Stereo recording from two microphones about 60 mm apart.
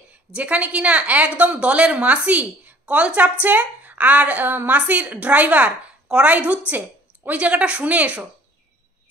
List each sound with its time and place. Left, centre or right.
0.1 s a woman's voice: right